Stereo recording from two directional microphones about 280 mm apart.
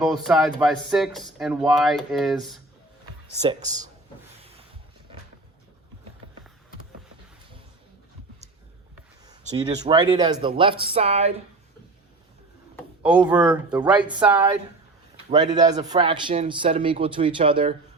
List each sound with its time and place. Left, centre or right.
0.0 s speech: centre
3.5 s speech: right
9.6 s speech: centre
13.0 s speech: centre
15.5 s speech: centre